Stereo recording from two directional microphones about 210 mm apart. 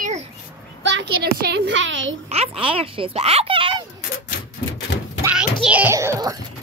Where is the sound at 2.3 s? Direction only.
25° right (ahead or behind).